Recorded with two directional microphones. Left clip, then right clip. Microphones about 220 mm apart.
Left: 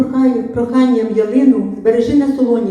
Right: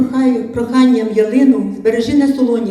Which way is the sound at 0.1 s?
50° right (ahead or behind).